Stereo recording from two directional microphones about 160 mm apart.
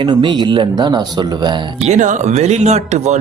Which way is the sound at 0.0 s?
30° right (ahead or behind).